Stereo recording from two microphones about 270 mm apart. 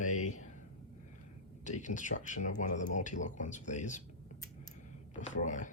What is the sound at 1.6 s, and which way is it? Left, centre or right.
Speech, left.